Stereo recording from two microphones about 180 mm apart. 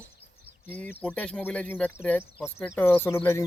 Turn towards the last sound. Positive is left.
turn(degrees=10)  # may be behind; listen again after turning